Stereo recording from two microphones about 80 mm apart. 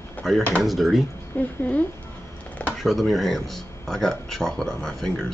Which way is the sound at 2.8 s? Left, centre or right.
Centre.